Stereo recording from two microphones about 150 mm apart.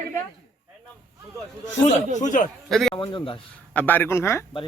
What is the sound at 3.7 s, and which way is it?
Speech, 10° left (ahead or behind).